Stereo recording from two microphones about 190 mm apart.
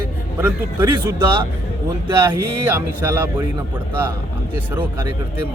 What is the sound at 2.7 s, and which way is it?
Speech, 10° right (ahead or behind).